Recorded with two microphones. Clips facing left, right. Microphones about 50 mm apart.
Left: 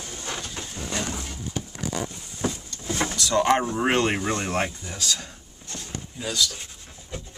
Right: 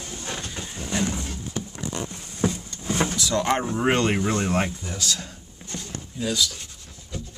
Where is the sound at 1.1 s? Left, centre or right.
Centre.